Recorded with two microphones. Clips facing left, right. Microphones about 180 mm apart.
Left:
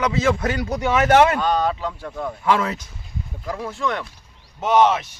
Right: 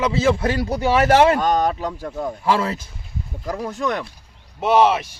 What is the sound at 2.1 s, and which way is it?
Speech, 25° right (ahead or behind).